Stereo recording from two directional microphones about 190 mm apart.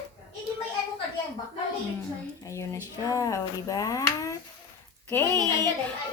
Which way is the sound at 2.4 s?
15° left (ahead or behind).